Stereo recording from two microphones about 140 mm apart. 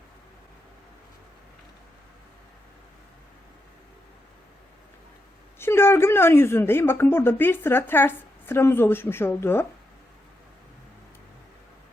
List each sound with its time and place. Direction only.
5.5 s speech: 15° left (ahead or behind)